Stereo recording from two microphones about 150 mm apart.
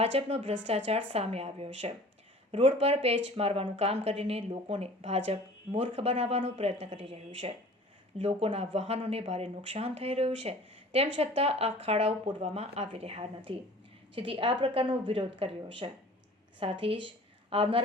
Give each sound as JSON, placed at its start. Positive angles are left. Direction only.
{"t": 0.0, "sound": "a woman's voice", "side_deg": -45}